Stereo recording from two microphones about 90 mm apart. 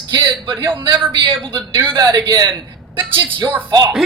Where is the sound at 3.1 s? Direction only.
65° right (ahead or behind).